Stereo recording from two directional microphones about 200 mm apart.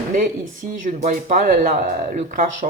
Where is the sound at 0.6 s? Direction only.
40° right (ahead or behind).